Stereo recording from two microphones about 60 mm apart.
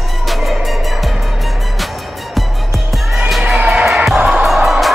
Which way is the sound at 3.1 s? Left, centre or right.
Centre.